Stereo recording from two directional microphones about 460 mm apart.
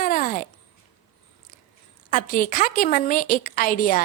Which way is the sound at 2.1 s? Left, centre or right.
Centre.